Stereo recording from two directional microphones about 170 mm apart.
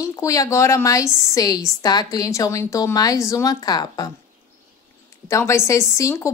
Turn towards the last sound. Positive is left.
turn(degrees=20)  # may be behind; listen again after turning